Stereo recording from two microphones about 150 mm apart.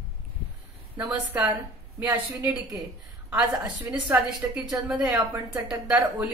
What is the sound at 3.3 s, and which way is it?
Speech, centre (ahead or behind).